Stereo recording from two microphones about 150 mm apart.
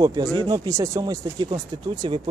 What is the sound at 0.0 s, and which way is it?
A man's voice, 25° right (ahead or behind).